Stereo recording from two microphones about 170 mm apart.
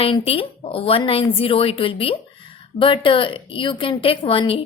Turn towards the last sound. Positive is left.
turn(degrees=30)  # may be behind; listen again after turning